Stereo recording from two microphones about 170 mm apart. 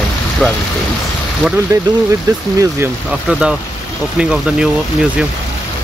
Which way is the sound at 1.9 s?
25° right (ahead or behind).